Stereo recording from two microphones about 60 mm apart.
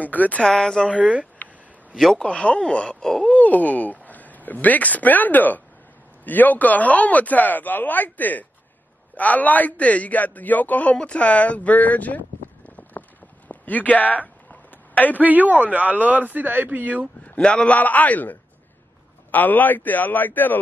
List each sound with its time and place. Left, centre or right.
0.0 s speech: left
0.4 s speech: centre
0.8 s speech: centre
2.0 s a man's voice: centre
2.2 s speech: centre
3.3 s a man's voice: left
12.6 s clip-clop: left
13.5 s a sound: left
15.1 s a man's voice: right
17.2 s a man's voice: centre